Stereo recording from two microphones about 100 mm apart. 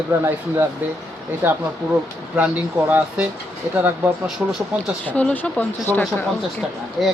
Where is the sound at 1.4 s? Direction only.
20° right (ahead or behind).